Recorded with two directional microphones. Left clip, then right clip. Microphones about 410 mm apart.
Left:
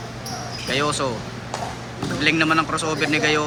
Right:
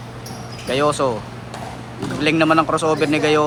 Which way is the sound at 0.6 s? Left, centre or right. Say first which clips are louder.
Right 5 dB; centre.